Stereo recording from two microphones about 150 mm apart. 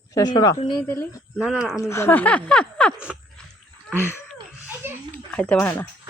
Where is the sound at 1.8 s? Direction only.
20° left (ahead or behind).